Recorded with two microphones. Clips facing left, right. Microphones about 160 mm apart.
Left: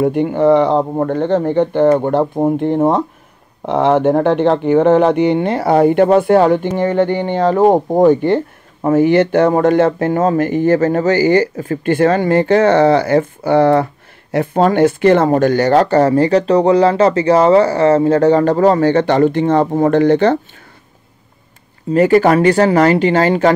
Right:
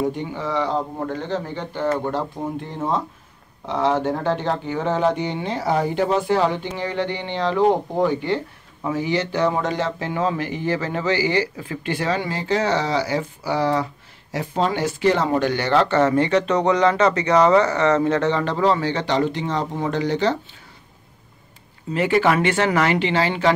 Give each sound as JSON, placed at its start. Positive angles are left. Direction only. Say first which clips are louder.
{"t": 0.0, "sound": "speech", "louder": "left 12 dB", "side_deg": 65}
{"t": 21.9, "sound": "speech", "louder": "left 8 dB", "side_deg": 40}